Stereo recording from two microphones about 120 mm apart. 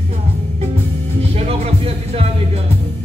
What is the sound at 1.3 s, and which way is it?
Music, 60° right (ahead or behind).